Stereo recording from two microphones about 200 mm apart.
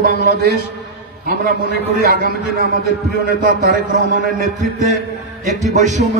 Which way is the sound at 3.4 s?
40° right (ahead or behind).